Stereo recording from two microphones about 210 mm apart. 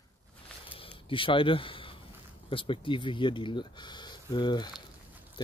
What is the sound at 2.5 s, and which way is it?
Speech, 25° left (ahead or behind).